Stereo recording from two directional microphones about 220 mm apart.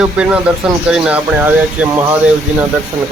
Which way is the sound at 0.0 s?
5° right (ahead or behind).